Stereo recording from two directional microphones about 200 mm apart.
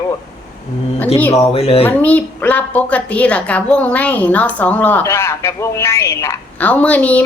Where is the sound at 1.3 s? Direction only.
30° left (ahead or behind).